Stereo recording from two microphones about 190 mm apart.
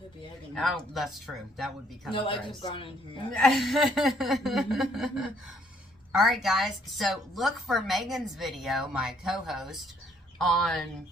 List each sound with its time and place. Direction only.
0.5 s a woman's voice: centre (ahead or behind)
2.1 s speech: 25° left (ahead or behind)
3.3 s a woman's voice: centre (ahead or behind)